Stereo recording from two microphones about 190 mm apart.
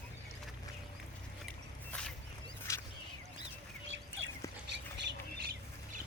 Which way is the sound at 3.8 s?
80° right.